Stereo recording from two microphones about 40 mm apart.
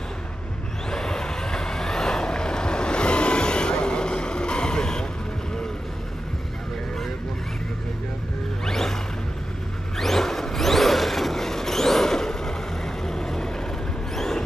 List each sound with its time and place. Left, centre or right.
0.8 s vehicle: centre
8.6 s music: centre
9.9 s a sound: centre
14.1 s vehicle: centre